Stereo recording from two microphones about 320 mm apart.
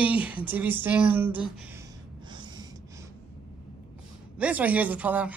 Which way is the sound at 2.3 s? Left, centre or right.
Centre.